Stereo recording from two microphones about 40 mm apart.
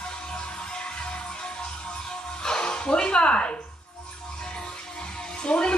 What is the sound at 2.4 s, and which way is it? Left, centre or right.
Speech, left.